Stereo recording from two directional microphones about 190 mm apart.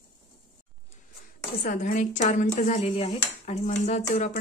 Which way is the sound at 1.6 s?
45° left (ahead or behind).